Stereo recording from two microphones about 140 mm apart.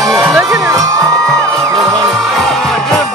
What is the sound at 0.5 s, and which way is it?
Music, 25° right (ahead or behind).